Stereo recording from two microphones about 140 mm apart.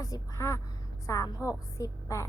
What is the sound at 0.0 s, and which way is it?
Speech, 25° left (ahead or behind).